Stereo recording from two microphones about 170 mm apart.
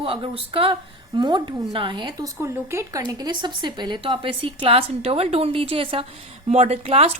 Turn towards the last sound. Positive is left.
turn(degrees=-35)  # may be behind; listen again after turning